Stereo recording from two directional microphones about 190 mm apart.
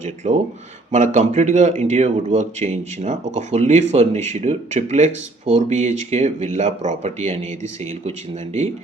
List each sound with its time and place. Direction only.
0.2 s speech: 35° right (ahead or behind)